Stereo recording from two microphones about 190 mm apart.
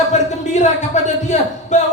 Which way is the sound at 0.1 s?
40° left (ahead or behind).